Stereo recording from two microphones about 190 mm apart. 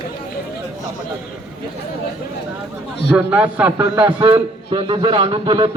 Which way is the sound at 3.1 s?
5° right (ahead or behind).